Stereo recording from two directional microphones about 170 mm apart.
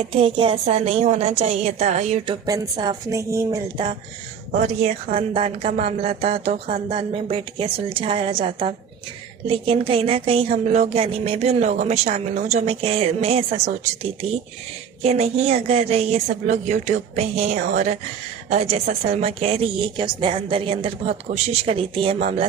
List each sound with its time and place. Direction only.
0.0 s a woman's voice: 35° right (ahead or behind)
2.3 s speech: 25° right (ahead or behind)
4.5 s speech: 45° right (ahead or behind)
5.3 s a woman's voice: 35° right (ahead or behind)